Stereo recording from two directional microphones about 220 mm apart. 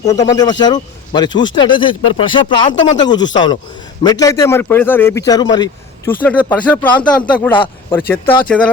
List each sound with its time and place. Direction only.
0.0 s a man's voice: 15° left (ahead or behind)
6.4 s a man's voice: 5° left (ahead or behind)